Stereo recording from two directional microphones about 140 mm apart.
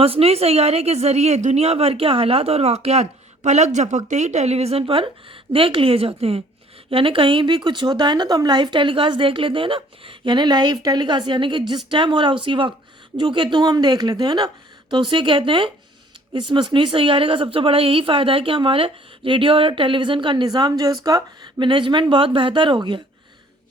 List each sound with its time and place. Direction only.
0.0 s a woman's voice: 45° right (ahead or behind)